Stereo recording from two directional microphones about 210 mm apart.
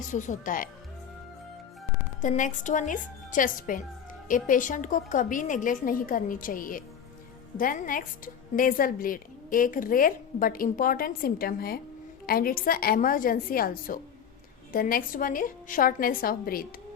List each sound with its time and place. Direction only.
0.1 s a woman's voice: 35° left (ahead or behind)
2.2 s a woman's voice: 35° left (ahead or behind)